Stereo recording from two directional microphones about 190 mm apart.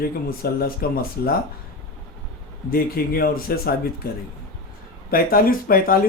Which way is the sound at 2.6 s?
50° left (ahead or behind).